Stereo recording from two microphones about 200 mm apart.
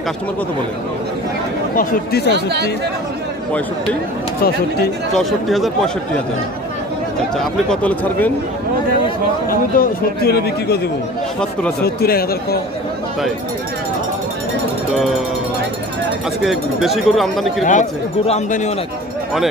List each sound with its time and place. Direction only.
1.8 s speech: 50° left (ahead or behind)
5.1 s speech: centre (ahead or behind)
7.3 s speech: 5° left (ahead or behind)
9.5 s speech: 50° left (ahead or behind)
11.8 s speech: 50° left (ahead or behind)
16.4 s speech: centre (ahead or behind)
17.6 s speech: 35° left (ahead or behind)